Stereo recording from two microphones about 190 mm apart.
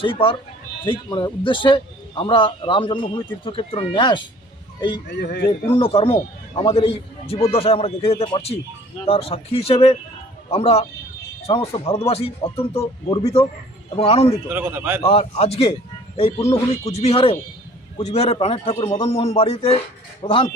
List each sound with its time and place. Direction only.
0.0 s speech: 25° left (ahead or behind)
5.0 s a man's voice: 60° left (ahead or behind)
5.5 s a man's voice: 30° left (ahead or behind)
14.5 s a man's voice: 10° right (ahead or behind)
15.0 s a man's voice: 30° left (ahead or behind)